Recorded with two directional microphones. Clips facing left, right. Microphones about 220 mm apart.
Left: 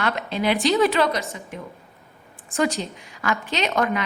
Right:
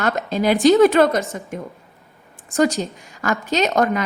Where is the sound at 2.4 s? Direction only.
45° right (ahead or behind).